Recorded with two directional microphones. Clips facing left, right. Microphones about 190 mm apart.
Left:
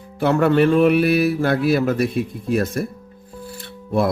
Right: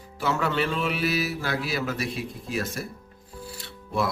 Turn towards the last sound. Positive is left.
turn(degrees=55)  # may be behind; listen again after turning